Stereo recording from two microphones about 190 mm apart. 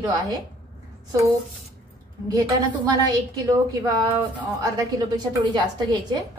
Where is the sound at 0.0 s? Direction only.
20° right (ahead or behind).